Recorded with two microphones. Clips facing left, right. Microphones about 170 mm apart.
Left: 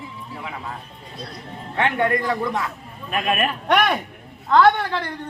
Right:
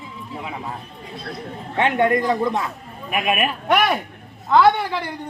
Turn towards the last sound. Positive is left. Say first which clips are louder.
# even
turn(degrees=-10)  # may be behind; listen again after turning